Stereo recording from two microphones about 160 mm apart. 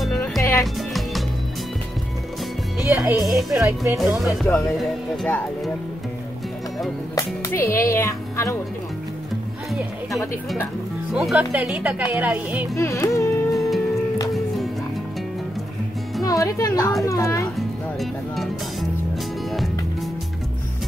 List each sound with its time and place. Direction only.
0.4 s music: 20° left (ahead or behind)
0.7 s music: centre (ahead or behind)
2.9 s speech: 5° right (ahead or behind)
3.5 s speech: 20° right (ahead or behind)
3.9 s speech: centre (ahead or behind)
7.2 s speech: 20° left (ahead or behind)
11.1 s speech: 5° right (ahead or behind)
12.7 s speech: 20° left (ahead or behind)
13.5 s music: centre (ahead or behind)
16.3 s speech: 20° left (ahead or behind)
18.3 s speech: centre (ahead or behind)